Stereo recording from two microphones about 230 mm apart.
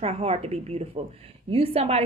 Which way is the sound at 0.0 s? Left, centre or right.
Right.